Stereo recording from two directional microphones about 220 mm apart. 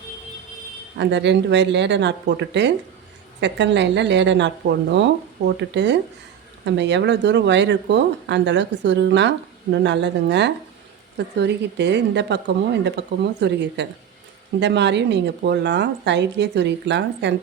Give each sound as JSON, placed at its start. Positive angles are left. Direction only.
{"t": 0.9, "sound": "a woman's voice", "side_deg": -50}